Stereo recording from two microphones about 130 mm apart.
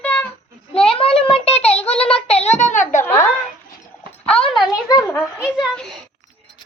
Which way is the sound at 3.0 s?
20° left (ahead or behind).